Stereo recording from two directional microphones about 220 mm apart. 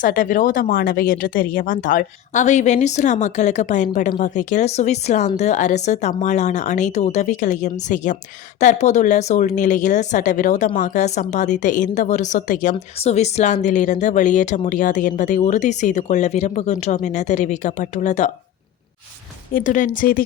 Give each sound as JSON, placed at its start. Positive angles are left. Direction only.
{"t": 0.0, "sound": "a woman's voice", "side_deg": 40}
{"t": 19.5, "sound": "a woman's voice", "side_deg": 35}